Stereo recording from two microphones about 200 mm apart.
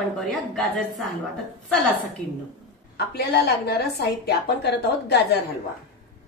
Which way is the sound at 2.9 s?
55° left (ahead or behind).